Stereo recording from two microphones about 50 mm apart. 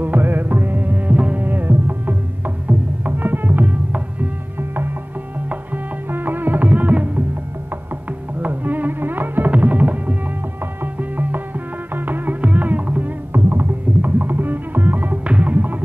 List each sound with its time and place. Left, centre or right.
0.0 s music: right
4.6 s music: right
8.4 s music: right
13.3 s music: right
15.2 s music: right